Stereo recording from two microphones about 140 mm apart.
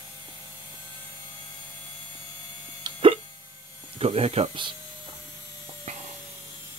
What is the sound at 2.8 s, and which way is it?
Hiccup, 40° right (ahead or behind).